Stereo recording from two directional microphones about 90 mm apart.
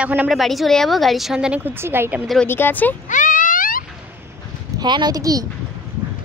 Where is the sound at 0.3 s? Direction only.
Centre (ahead or behind).